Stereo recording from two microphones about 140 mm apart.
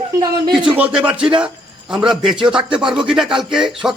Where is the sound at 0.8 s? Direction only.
10° right (ahead or behind).